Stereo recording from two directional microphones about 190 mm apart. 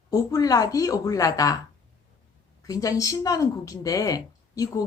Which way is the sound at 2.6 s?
20° left (ahead or behind).